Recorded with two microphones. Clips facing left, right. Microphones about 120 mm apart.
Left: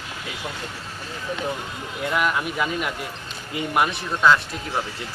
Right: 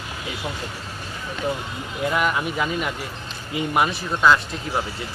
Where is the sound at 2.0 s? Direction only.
Centre (ahead or behind).